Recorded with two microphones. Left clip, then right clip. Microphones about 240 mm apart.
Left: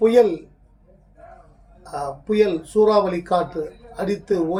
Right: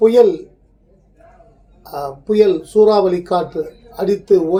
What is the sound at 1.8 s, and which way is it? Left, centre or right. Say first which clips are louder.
Speech: right 3 dB; centre.